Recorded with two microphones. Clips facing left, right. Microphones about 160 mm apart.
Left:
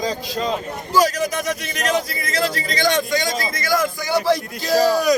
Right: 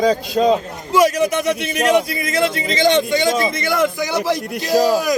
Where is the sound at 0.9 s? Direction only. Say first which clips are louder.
Right 4 dB; 25° right (ahead or behind).